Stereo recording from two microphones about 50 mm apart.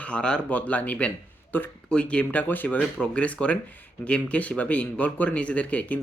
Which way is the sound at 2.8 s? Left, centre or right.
Left.